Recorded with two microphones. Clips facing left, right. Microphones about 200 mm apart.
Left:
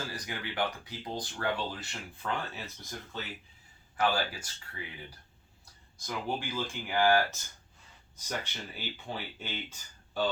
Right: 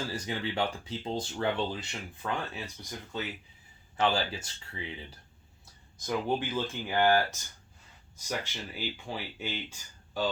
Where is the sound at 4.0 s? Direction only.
25° right (ahead or behind).